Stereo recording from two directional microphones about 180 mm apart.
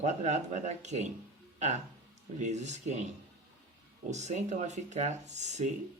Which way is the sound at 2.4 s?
40° right (ahead or behind).